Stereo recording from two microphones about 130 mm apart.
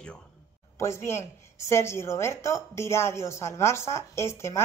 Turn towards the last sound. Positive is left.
turn(degrees=20)  # may be behind; listen again after turning